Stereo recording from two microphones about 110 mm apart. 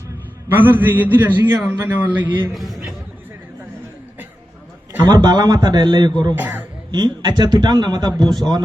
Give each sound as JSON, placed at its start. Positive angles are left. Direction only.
{"t": 0.4, "sound": "a man's voice", "side_deg": -20}
{"t": 2.6, "sound": "a man's voice", "side_deg": 0}
{"t": 5.0, "sound": "a man's voice", "side_deg": -40}
{"t": 6.3, "sound": "a man's voice", "side_deg": -15}
{"t": 6.9, "sound": "a man's voice", "side_deg": -40}